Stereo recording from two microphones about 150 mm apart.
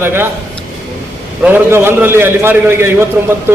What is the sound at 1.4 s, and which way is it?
A man's voice, 15° right (ahead or behind).